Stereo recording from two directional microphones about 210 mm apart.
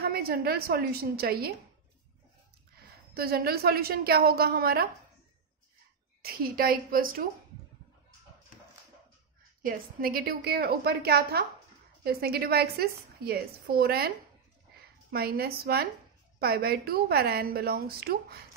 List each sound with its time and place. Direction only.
0.0 s a woman's voice: 45° right (ahead or behind)
3.2 s a woman's voice: 45° right (ahead or behind)
6.2 s a woman's voice: 45° right (ahead or behind)
9.7 s a woman's voice: 45° right (ahead or behind)